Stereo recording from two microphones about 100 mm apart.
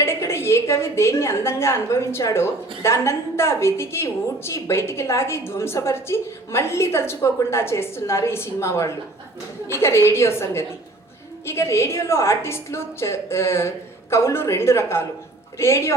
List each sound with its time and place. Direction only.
0.0 s a woman's voice: 25° left (ahead or behind)